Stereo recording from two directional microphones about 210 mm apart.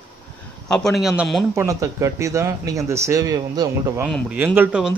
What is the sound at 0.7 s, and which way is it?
Speech, centre (ahead or behind).